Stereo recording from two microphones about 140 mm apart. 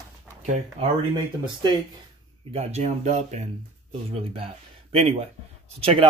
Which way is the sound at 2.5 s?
50° right (ahead or behind).